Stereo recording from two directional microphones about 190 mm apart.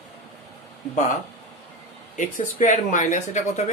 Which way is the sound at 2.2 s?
40° left (ahead or behind).